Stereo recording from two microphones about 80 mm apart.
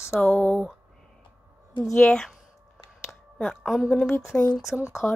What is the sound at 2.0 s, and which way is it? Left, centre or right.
Speech, centre.